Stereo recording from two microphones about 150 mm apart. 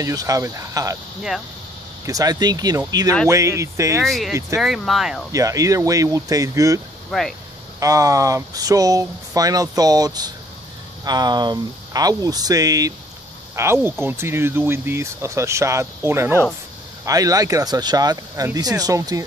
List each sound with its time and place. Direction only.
0.0 s speech: 25° right (ahead or behind)
2.0 s speech: 25° right (ahead or behind)
4.0 s speech: centre (ahead or behind)
4.3 s speech: 20° right (ahead or behind)
4.6 s speech: centre (ahead or behind)
5.3 s speech: 20° right (ahead or behind)
7.1 s speech: 5° left (ahead or behind)
7.8 s speech: 20° right (ahead or behind)